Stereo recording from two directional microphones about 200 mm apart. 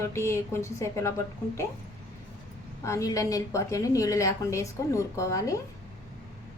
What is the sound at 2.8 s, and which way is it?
A woman's voice, 15° left (ahead or behind).